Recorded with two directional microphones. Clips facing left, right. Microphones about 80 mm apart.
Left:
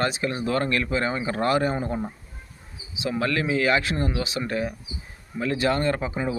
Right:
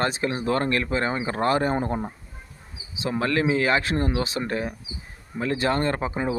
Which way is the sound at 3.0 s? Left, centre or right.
Right.